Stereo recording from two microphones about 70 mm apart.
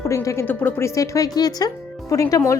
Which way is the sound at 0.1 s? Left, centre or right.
Left.